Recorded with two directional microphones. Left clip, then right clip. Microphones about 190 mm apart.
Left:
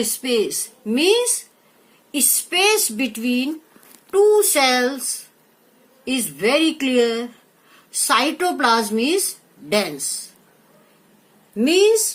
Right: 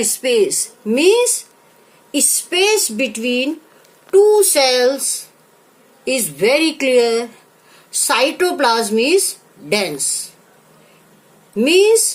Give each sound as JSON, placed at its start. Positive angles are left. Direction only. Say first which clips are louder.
{"t": 0.0, "sound": "a woman's voice", "louder": "right 5 dB", "side_deg": -35}
{"t": 6.1, "sound": "a woman's voice", "louder": "right 4 dB", "side_deg": -25}
{"t": 11.5, "sound": "a woman's voice", "louder": "right 4 dB", "side_deg": -25}